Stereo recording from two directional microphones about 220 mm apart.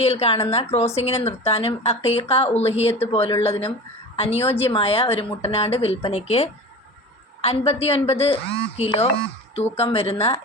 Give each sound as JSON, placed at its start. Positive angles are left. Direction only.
{"t": 0.0, "sound": "speech", "side_deg": 30}